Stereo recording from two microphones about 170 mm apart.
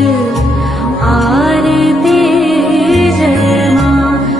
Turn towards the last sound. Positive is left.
turn(degrees=0)  # may be behind; listen again after turning